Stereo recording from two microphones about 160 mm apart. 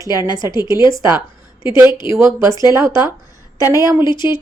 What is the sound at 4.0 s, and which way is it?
Speech, 30° left (ahead or behind).